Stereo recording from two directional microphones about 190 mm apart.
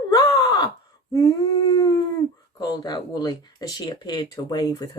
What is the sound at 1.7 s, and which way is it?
Speech, 20° left (ahead or behind).